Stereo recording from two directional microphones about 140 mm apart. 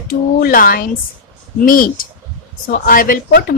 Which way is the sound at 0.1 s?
90° left.